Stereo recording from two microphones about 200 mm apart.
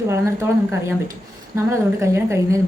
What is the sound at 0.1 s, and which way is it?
A woman's voice, 15° right (ahead or behind).